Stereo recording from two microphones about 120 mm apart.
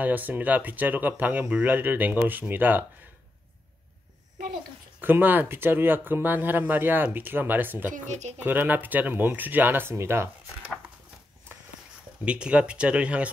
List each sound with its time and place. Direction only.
0.0 s speech: 15° right (ahead or behind)
5.0 s speech: 15° right (ahead or behind)
8.1 s speech: 75° right (ahead or behind)
8.4 s speech: 15° right (ahead or behind)
12.3 s speech: 10° right (ahead or behind)